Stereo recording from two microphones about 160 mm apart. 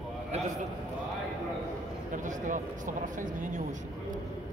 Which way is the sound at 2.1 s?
55° right (ahead or behind).